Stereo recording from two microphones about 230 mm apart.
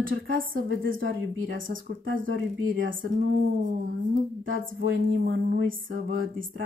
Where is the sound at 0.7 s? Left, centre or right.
Right.